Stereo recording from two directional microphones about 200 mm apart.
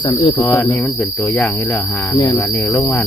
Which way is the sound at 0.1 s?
20° left (ahead or behind).